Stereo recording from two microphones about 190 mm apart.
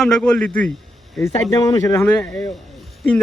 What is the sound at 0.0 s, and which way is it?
A man's voice, 5° left (ahead or behind).